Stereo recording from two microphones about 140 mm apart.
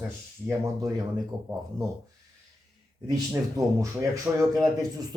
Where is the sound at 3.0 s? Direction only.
25° right (ahead or behind).